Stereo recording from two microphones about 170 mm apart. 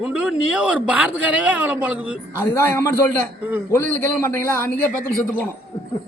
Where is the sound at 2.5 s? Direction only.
15° left (ahead or behind).